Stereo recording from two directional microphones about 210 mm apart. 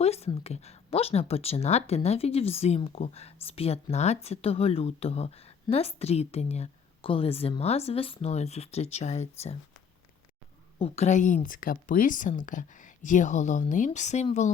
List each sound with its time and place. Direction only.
0.0 s speech: 30° left (ahead or behind)
10.8 s speech: 30° left (ahead or behind)